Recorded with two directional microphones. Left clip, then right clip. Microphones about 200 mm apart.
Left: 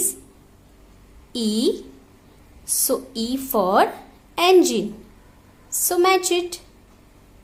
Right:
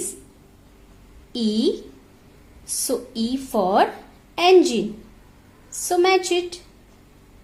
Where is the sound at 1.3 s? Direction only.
30° left (ahead or behind).